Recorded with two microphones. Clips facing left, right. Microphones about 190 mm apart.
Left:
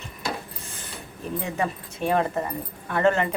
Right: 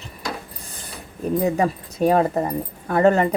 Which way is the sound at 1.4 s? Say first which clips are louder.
Right 7 dB; 40° right (ahead or behind).